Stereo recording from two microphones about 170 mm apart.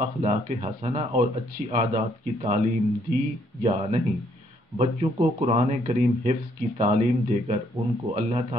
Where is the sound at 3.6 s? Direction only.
40° right (ahead or behind).